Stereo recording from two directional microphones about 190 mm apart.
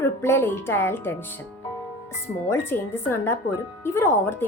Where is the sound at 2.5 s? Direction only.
10° left (ahead or behind).